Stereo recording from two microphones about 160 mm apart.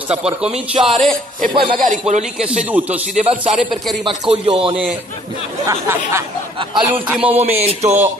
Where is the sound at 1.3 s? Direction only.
60° right (ahead or behind).